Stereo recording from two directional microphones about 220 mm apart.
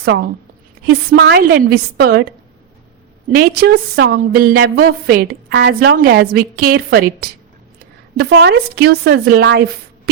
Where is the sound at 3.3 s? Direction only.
45° right (ahead or behind).